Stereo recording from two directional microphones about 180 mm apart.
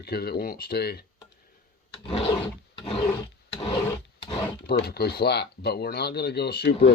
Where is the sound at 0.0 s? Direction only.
60° left (ahead or behind).